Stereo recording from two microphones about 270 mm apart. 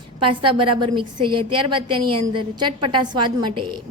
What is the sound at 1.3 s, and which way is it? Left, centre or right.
Speech, right.